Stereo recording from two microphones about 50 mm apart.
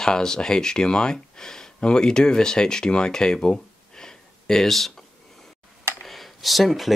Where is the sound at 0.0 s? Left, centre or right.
Centre.